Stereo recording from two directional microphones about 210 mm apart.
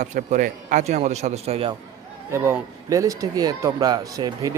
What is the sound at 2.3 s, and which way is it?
Speech, 10° right (ahead or behind).